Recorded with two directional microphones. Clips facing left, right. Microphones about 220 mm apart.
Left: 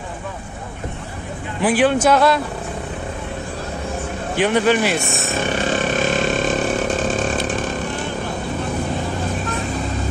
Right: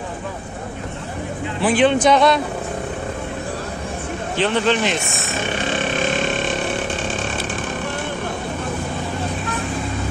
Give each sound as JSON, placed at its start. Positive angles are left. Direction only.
{"t": 1.6, "sound": "speech", "side_deg": 10}
{"t": 4.4, "sound": "speech", "side_deg": 10}
{"t": 7.0, "sound": "a sound", "side_deg": 40}